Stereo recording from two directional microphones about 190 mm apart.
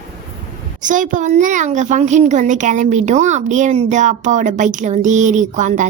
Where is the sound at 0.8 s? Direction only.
40° right (ahead or behind).